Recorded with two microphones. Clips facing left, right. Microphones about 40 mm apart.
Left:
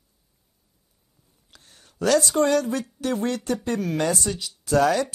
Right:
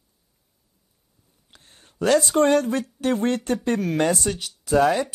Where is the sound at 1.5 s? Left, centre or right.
Right.